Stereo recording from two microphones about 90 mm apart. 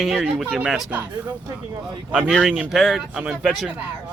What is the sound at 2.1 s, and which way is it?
Speech, 10° right (ahead or behind).